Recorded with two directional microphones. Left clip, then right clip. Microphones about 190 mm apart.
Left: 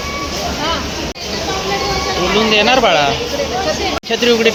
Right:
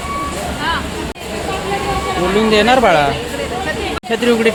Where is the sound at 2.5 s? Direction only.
20° right (ahead or behind).